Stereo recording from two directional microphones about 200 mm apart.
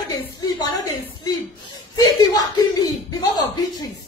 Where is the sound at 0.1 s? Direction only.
20° left (ahead or behind).